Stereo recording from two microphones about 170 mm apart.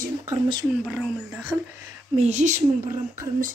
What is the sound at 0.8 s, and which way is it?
Speech, 5° right (ahead or behind).